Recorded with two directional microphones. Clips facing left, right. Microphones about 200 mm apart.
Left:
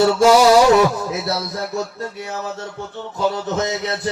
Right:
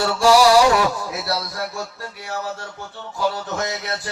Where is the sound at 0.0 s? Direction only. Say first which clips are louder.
Left 3 dB; 20° left (ahead or behind).